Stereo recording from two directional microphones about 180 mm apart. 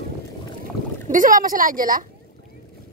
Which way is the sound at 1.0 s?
45° right (ahead or behind).